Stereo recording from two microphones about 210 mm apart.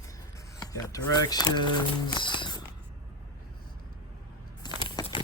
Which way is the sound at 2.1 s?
20° left (ahead or behind).